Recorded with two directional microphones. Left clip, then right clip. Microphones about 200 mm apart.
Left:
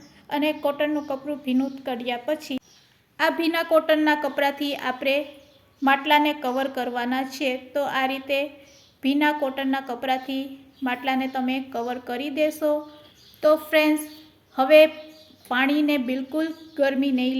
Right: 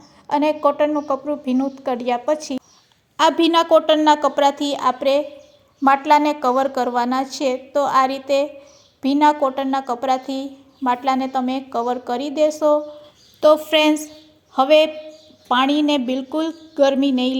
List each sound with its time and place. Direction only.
0.3 s a woman's voice: 20° right (ahead or behind)